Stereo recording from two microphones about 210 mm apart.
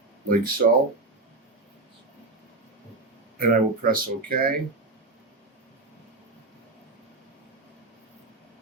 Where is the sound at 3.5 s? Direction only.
45° right (ahead or behind).